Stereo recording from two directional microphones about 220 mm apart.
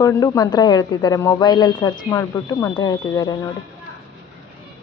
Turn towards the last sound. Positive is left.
turn(degrees=15)  # may be behind; listen again after turning